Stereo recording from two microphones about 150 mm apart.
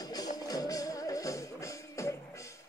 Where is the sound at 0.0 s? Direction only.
25° left (ahead or behind).